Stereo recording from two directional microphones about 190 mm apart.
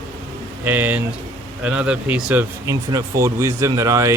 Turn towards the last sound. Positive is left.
turn(degrees=-15)  # may be behind; listen again after turning